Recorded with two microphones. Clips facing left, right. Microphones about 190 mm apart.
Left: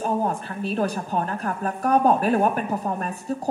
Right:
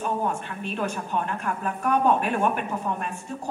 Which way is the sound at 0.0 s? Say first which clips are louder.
Left 3 dB; 35° left (ahead or behind).